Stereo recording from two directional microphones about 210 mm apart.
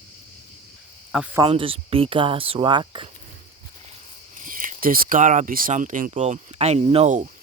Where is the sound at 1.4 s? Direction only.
25° right (ahead or behind).